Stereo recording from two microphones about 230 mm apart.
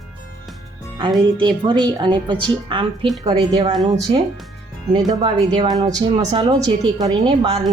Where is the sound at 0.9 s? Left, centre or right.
Centre.